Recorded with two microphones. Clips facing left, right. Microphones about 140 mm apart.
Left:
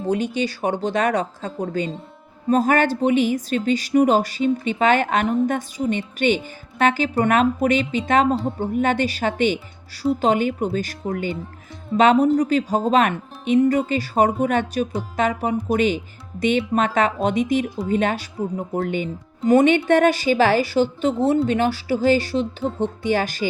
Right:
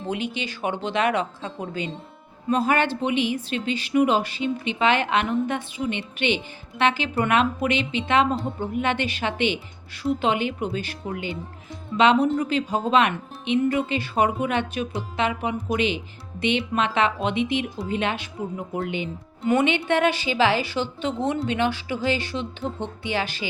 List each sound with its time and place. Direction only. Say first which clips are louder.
0.1 s speech: left 7 dB; 40° left (ahead or behind)